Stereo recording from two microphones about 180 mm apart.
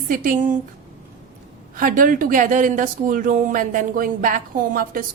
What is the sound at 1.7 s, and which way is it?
A woman's voice, 50° right (ahead or behind).